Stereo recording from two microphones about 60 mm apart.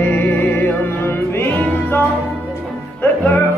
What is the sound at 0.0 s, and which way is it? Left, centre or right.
Music, left.